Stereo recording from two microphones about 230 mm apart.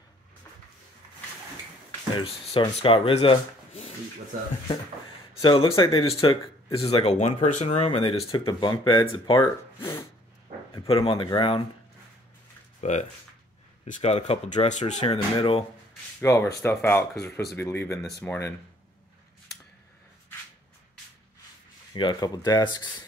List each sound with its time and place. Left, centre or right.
2.1 s speech: left
5.3 s speech: left
12.8 s speech: left
16.2 s speech: centre
21.9 s speech: centre